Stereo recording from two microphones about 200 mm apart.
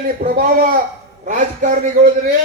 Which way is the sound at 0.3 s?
45° right (ahead or behind).